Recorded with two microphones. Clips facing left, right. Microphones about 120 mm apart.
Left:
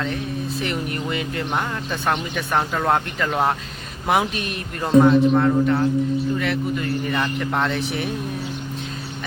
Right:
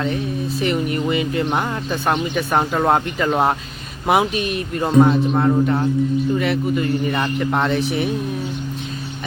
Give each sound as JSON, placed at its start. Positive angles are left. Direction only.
{"t": 0.6, "sound": "speech", "side_deg": -5}
{"t": 4.0, "sound": "speech", "side_deg": -10}
{"t": 7.1, "sound": "speech", "side_deg": -15}